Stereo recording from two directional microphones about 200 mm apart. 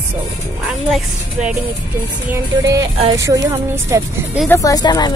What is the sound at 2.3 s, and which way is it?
Speech, 15° right (ahead or behind).